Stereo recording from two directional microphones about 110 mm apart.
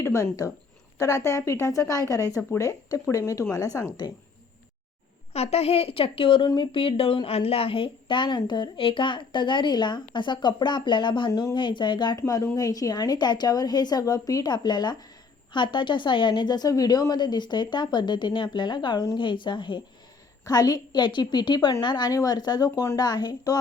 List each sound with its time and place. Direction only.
0.0 s speech: 25° left (ahead or behind)
5.3 s a woman's voice: 70° left (ahead or behind); by 11.3 s 45° left (ahead or behind)
11.3 s a woman's voice: 30° left (ahead or behind)
11.5 s speech: 45° left (ahead or behind)
12.1 s a woman's voice: 25° left (ahead or behind); by 19.8 s 45° left (ahead or behind)
20.4 s a woman's voice: 35° left (ahead or behind)